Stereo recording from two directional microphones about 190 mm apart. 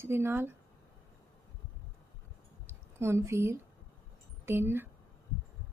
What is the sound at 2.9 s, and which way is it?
A woman's voice, 15° right (ahead or behind).